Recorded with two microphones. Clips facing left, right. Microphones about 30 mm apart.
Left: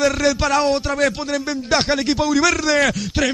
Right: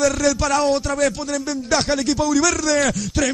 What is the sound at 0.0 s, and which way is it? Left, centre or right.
Male singing, left.